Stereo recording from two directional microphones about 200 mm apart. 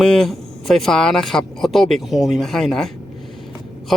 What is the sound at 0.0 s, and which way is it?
Speech, 5° left (ahead or behind).